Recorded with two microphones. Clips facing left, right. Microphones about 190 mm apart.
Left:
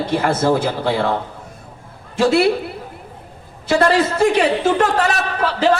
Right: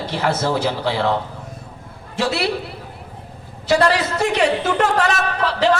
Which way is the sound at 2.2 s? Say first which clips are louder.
Left 7 dB; 50° left (ahead or behind).